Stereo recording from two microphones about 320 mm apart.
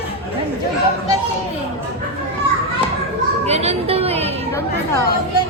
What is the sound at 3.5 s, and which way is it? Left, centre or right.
Speech, centre.